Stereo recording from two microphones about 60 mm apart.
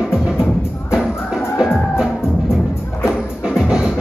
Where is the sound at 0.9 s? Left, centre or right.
Centre.